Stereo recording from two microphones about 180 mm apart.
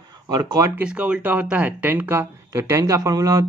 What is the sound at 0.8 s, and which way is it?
Speech, 5° right (ahead or behind).